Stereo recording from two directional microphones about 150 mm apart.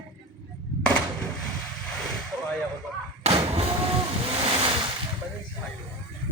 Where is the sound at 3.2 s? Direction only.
40° right (ahead or behind).